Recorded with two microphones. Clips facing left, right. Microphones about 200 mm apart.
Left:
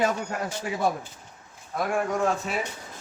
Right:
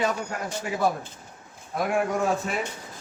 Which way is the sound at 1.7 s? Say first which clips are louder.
Right 1 dB; 5° right (ahead or behind).